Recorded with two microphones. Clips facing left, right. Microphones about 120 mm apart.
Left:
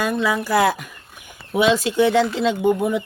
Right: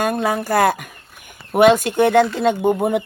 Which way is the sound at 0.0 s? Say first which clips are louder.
Right 1 dB; 50° right (ahead or behind).